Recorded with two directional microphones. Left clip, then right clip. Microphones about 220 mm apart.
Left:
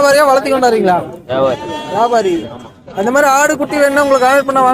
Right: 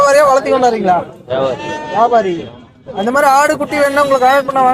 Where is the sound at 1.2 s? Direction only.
35° left (ahead or behind).